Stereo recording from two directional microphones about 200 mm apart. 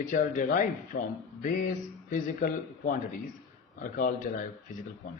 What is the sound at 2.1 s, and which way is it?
Speech, 45° left (ahead or behind).